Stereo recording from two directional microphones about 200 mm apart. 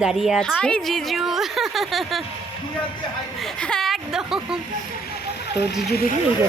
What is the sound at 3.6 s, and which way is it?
Speech, 5° left (ahead or behind).